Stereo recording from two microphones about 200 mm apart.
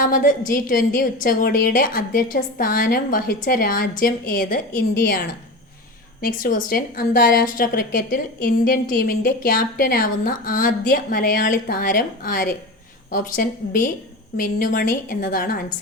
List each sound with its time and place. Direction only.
0.0 s a woman's voice: 40° left (ahead or behind)
6.2 s a woman's voice: 45° left (ahead or behind)